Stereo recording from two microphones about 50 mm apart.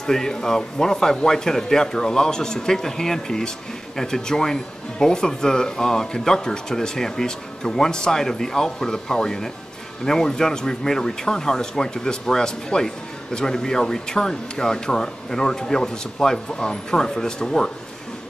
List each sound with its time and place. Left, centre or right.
0.0 s speech: centre